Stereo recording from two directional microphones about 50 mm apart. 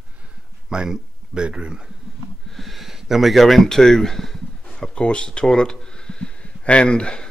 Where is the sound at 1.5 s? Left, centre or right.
Centre.